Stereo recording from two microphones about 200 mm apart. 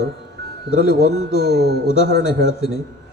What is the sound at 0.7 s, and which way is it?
Speech, 55° left (ahead or behind).